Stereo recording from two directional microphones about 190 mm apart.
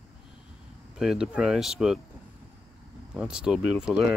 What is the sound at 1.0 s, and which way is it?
Speech, 5° right (ahead or behind).